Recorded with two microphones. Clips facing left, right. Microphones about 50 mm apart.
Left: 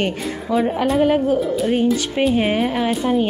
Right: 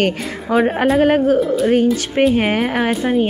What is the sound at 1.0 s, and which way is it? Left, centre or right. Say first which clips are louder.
Speech: right 3 dB; right.